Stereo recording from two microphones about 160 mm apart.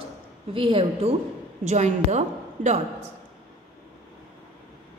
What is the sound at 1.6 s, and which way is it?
A woman's voice, 45° right (ahead or behind).